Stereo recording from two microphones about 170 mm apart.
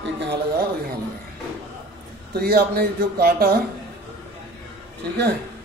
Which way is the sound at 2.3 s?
65° right (ahead or behind).